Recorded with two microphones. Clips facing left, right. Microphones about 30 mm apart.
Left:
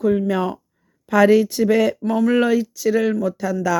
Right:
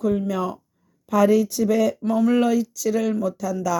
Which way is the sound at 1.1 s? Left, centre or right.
Left.